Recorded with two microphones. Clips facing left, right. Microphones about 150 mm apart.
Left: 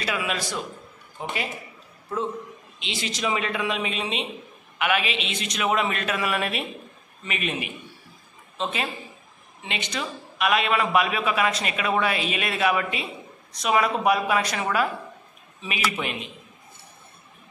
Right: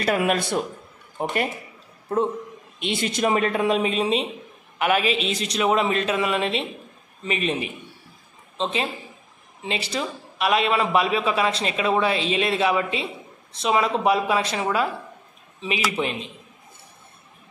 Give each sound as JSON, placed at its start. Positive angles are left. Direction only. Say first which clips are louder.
{"t": 0.0, "sound": "a woman's voice", "louder": "right 7 dB", "side_deg": -50}
{"t": 16.0, "sound": "a man's voice", "louder": "right 4 dB", "side_deg": -30}